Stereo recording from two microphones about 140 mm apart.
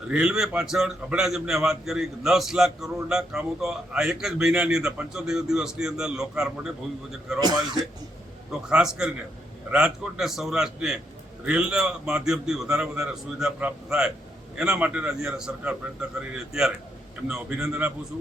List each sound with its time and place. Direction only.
0.1 s a man's voice: 5° right (ahead or behind)
7.3 s a man's voice: 30° right (ahead or behind)
8.7 s a man's voice: 5° right (ahead or behind)